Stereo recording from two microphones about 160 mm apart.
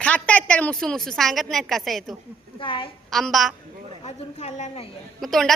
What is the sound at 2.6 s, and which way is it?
Speech, 35° left (ahead or behind).